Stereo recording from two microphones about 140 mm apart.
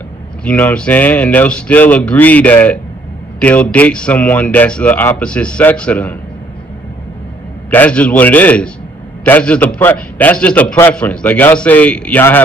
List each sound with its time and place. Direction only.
0.4 s a man's voice: 10° left (ahead or behind)
7.7 s a man's voice: 10° left (ahead or behind)